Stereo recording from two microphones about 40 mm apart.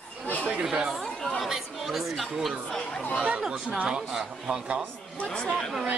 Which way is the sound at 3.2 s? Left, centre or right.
Right.